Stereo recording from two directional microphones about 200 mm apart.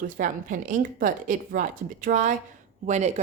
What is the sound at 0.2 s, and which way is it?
A woman's voice, 40° right (ahead or behind).